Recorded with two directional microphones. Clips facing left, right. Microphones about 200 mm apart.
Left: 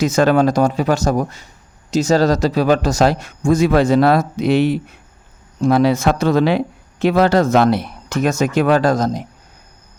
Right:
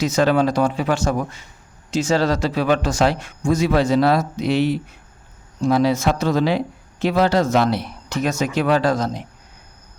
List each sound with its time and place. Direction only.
0.0 s speech: 50° left (ahead or behind)